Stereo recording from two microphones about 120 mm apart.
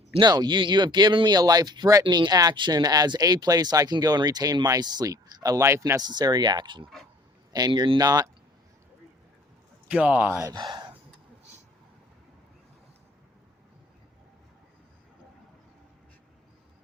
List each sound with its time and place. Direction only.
0.1 s speech: 35° right (ahead or behind)
9.9 s speech: 10° right (ahead or behind)
10.5 s speech: 35° right (ahead or behind)